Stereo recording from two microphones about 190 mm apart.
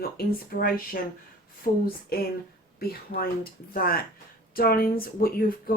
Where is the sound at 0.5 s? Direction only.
55° left (ahead or behind).